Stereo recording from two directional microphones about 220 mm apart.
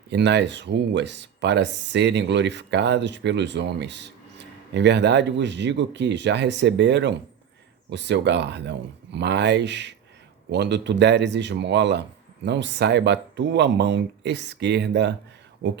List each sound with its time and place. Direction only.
0.1 s speech: 50° right (ahead or behind)